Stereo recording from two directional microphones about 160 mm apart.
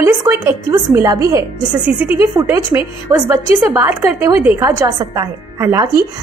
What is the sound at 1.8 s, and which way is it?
A woman's voice, 10° right (ahead or behind).